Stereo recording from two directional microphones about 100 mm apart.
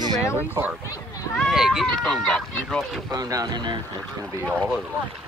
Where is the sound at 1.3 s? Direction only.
Centre (ahead or behind).